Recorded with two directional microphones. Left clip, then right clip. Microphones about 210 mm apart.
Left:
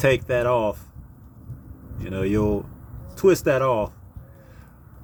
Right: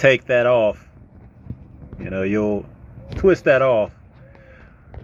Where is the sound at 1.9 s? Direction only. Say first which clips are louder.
Right 3 dB; centre (ahead or behind).